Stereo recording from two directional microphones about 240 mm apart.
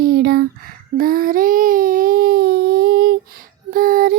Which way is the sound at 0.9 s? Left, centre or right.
Right.